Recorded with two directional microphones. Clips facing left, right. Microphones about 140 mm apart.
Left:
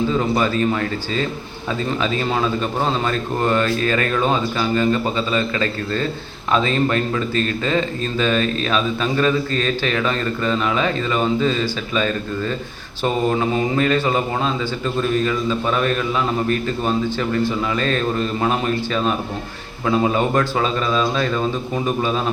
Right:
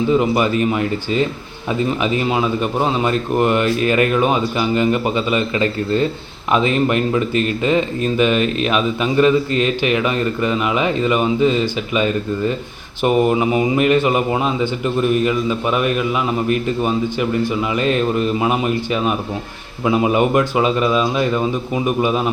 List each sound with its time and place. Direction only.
0.1 s speech: 15° right (ahead or behind)